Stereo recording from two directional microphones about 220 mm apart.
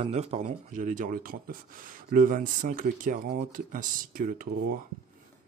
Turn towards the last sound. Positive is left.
turn(degrees=-40)  # may be behind; listen again after turning